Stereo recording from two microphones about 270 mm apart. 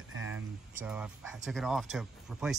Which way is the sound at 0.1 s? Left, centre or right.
Right.